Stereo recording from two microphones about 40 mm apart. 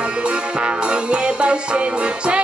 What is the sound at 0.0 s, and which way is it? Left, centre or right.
Music, right.